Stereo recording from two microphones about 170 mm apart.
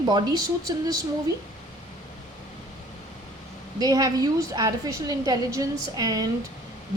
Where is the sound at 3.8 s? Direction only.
20° right (ahead or behind).